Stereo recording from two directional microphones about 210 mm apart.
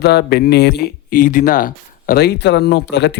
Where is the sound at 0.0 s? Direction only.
50° left (ahead or behind).